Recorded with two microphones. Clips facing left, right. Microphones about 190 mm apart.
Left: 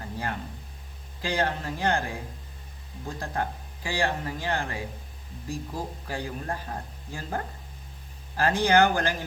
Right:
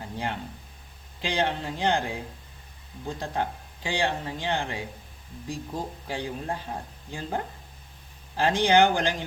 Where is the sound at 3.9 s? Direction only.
25° right (ahead or behind).